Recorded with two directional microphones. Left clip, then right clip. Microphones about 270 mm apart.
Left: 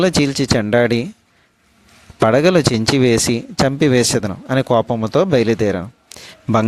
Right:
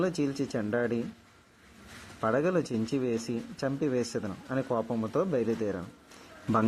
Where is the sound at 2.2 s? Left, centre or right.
Left.